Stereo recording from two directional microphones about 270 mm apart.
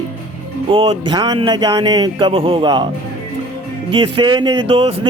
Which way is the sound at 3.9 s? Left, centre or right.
Centre.